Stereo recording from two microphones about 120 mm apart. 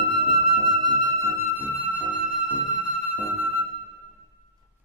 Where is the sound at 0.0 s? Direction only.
45° right (ahead or behind); by 3.6 s 15° right (ahead or behind).